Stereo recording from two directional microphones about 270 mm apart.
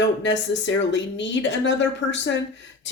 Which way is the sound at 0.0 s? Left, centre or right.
Left.